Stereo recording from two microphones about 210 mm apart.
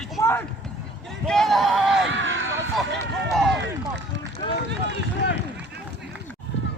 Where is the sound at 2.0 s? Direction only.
60° right (ahead or behind).